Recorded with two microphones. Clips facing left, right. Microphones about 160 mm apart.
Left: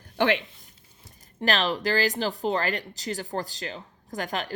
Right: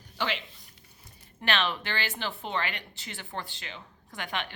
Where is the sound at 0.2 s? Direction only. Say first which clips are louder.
Left 9 dB; 55° left (ahead or behind).